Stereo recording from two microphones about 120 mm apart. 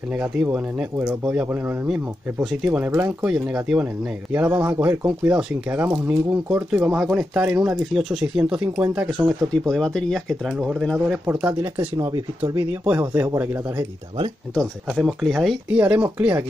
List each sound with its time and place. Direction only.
0.2 s speech: 15° right (ahead or behind)
9.7 s speech: 5° left (ahead or behind)
11.2 s speech: 15° right (ahead or behind)
13.0 s speech: 25° right (ahead or behind)
14.5 s speech: 5° left (ahead or behind)
15.8 s speech: 10° right (ahead or behind)